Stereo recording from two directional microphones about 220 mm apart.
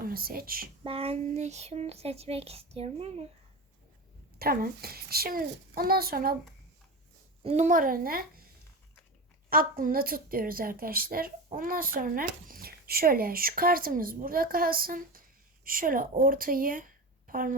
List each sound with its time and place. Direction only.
0.0 s speech: 45° right (ahead or behind)
0.9 s speech: 25° right (ahead or behind)
4.4 s a child's voice: 45° right (ahead or behind)
7.4 s a woman's voice: 30° right (ahead or behind)
9.5 s a woman's voice: 40° right (ahead or behind)